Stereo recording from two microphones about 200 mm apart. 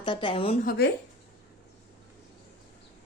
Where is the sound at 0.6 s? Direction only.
45° left (ahead or behind).